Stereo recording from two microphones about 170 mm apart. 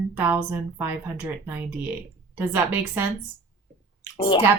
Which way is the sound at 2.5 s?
15° right (ahead or behind).